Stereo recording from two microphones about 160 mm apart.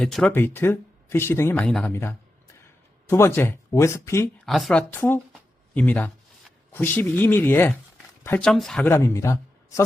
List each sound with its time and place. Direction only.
0.0 s speech: 5° left (ahead or behind)
4.4 s speech: centre (ahead or behind)
5.3 s a sound: 10° left (ahead or behind)
6.7 s speech: 10° left (ahead or behind)
8.4 s speech: 5° left (ahead or behind)
8.9 s a man's voice: 15° left (ahead or behind)